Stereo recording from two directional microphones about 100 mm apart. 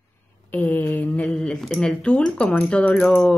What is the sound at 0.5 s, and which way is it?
Mantra, 20° left (ahead or behind).